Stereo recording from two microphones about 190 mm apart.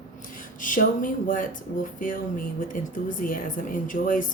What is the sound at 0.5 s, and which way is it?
A woman's voice, 45° left (ahead or behind).